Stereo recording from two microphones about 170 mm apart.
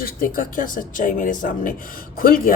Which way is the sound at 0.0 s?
55° left (ahead or behind).